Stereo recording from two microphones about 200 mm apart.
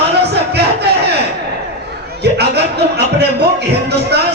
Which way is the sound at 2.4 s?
55° right (ahead or behind).